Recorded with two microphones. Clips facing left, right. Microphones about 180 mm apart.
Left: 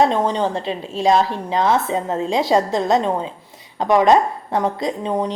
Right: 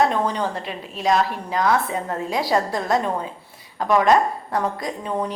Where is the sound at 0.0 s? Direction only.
25° left (ahead or behind).